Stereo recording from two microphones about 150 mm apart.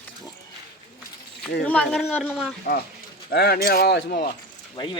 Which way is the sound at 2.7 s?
90° left.